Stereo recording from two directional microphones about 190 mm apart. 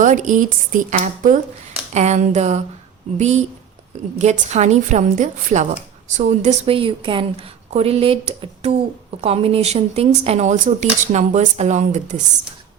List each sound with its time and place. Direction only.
0.0 s a woman's voice: 40° right (ahead or behind)